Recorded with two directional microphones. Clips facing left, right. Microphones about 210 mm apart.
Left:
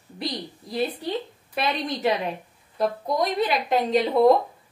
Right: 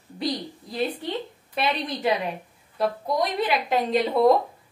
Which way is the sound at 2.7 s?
Centre (ahead or behind).